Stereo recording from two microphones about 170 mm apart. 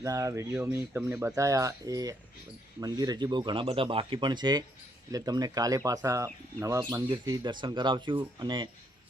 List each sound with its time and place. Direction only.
0.0 s speech: 20° right (ahead or behind)